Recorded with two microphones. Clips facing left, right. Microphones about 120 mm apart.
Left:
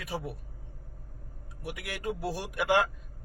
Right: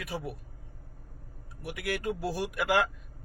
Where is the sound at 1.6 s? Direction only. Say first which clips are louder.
Right 4 dB; 20° left (ahead or behind).